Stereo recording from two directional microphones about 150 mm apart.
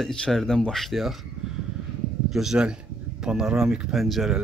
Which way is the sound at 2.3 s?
5° right (ahead or behind).